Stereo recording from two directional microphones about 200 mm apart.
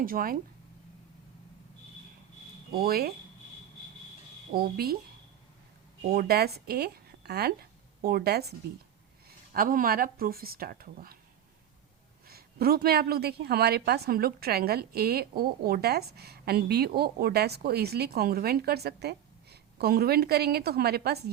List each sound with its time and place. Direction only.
0.0 s a woman's voice: 45° right (ahead or behind)
2.7 s a woman's voice: 50° right (ahead or behind)
4.5 s a woman's voice: 50° right (ahead or behind)
6.1 s a woman's voice: 50° right (ahead or behind)
12.3 s a woman's voice: 50° right (ahead or behind)